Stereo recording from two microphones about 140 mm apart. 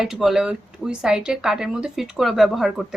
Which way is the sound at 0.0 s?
Centre (ahead or behind).